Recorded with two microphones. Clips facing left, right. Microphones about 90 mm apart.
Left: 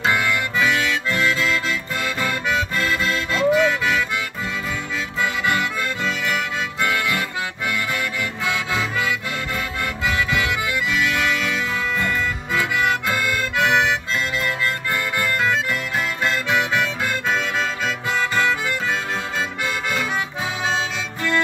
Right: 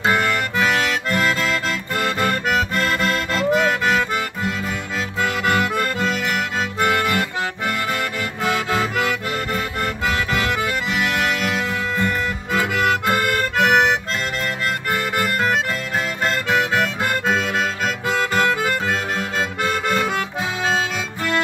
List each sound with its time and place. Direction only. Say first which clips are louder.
0.0 s accordion: right 2 dB; 50° right (ahead or behind)
5.2 s accordion: right 2 dB; 50° right (ahead or behind)
8.5 s music: right 4 dB; 55° right (ahead or behind)
10.0 s accordion: even; 45° right (ahead or behind)
12.5 s music: right 2 dB; 50° right (ahead or behind)
16.3 s music: right 2 dB; 50° right (ahead or behind)
19.9 s music: right 3 dB; 55° right (ahead or behind)